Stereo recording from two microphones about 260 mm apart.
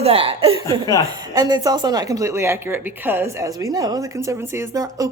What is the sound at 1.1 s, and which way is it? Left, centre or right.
Speech, centre.